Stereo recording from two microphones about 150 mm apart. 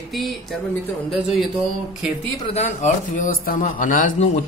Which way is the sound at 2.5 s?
45° left (ahead or behind).